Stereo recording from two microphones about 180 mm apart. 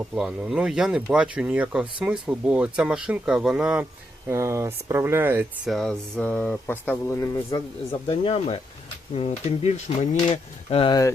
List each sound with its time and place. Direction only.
0.1 s speech: 5° right (ahead or behind)
5.7 s speech: 5° left (ahead or behind)
8.0 s speech: 30° left (ahead or behind)